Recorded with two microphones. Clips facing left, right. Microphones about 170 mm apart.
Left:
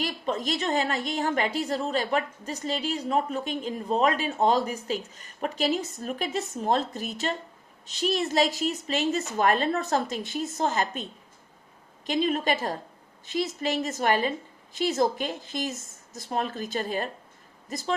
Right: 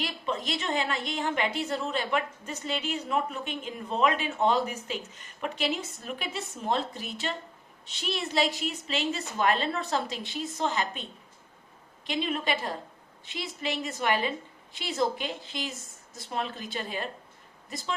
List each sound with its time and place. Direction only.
0.0 s a woman's voice: 45° left (ahead or behind)
12.0 s a woman's voice: 40° left (ahead or behind)